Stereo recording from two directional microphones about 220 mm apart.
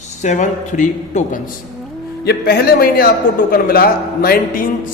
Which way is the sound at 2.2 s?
45° left (ahead or behind).